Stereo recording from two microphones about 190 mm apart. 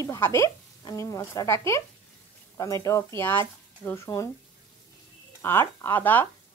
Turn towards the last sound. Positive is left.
turn(degrees=10)  # may be behind; listen again after turning